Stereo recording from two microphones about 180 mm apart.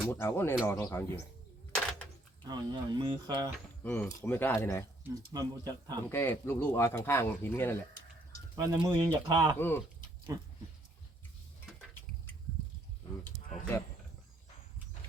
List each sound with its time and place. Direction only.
0.1 s speech: 15° left (ahead or behind)
1.7 s a sound: 5° left (ahead or behind)
2.4 s speech: 20° right (ahead or behind)
3.8 s speech: 10° left (ahead or behind)
5.0 s speech: 20° right (ahead or behind)
6.1 s speech: 10° left (ahead or behind)
8.5 s speech: 15° right (ahead or behind)
9.6 s speech: 10° left (ahead or behind)
10.3 s speech: 20° right (ahead or behind)